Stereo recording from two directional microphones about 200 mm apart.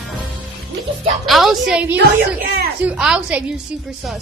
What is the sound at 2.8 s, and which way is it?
Speech, 5° right (ahead or behind).